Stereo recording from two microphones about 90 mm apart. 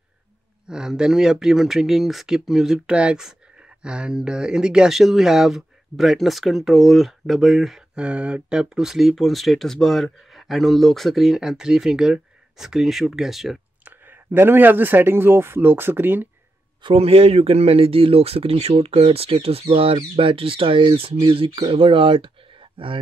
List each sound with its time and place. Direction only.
0.7 s speech: 10° right (ahead or behind)
8.0 s speech: 15° right (ahead or behind)
13.8 s speech: 25° right (ahead or behind)
16.8 s speech: 90° right